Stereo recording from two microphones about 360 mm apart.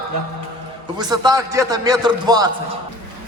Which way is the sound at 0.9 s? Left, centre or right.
Centre.